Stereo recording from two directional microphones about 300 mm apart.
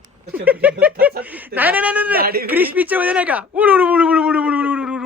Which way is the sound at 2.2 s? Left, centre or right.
Right.